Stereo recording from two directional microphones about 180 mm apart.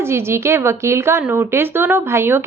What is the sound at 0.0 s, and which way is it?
A woman's voice, 15° right (ahead or behind).